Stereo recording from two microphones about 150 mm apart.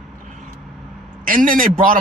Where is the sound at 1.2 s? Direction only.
65° right (ahead or behind).